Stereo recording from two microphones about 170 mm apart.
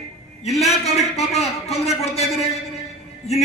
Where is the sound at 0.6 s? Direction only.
40° left (ahead or behind).